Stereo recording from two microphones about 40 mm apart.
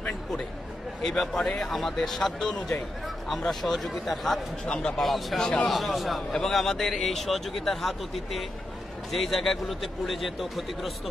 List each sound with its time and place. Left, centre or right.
1.0 s a man's voice: centre
4.6 s a man's voice: left
5.0 s speech: centre
6.3 s speech: centre